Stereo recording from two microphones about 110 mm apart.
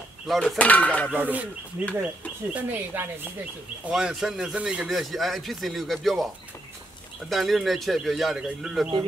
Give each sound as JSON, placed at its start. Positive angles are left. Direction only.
{"t": 0.3, "sound": "speech", "side_deg": 0}
{"t": 0.6, "sound": "speech", "side_deg": 15}
{"t": 1.1, "sound": "speech", "side_deg": -15}
{"t": 2.5, "sound": "speech", "side_deg": -15}
{"t": 3.9, "sound": "speech", "side_deg": -5}